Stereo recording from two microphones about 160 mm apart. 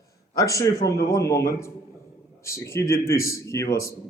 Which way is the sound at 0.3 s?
20° left (ahead or behind).